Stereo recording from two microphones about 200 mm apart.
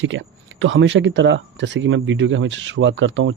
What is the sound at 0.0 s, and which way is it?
Speech, 70° right (ahead or behind).